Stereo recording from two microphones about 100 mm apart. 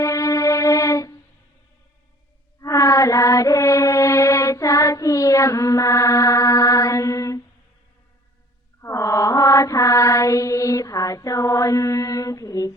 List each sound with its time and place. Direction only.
0.0 s music: 40° left (ahead or behind)
2.6 s child singing: 35° left (ahead or behind)
8.8 s mantra: 30° left (ahead or behind)